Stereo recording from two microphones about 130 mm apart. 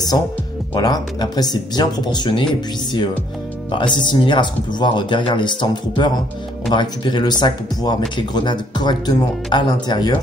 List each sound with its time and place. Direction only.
0.7 s speech: 30° left (ahead or behind)
3.7 s speech: 35° left (ahead or behind)